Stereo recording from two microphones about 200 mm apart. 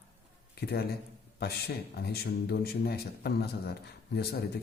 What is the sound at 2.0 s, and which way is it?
A man's voice, 50° left (ahead or behind).